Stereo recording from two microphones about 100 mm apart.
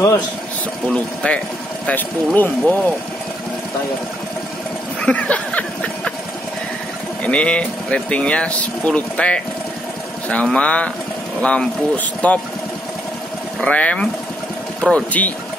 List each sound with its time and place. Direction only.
0.8 s speech: 10° left (ahead or behind)
5.0 s a sound: 10° left (ahead or behind)
7.2 s speech: 10° left (ahead or behind)
13.6 s speech: 15° left (ahead or behind)